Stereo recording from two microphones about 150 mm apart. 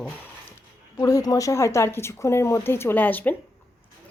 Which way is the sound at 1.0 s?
25° left (ahead or behind).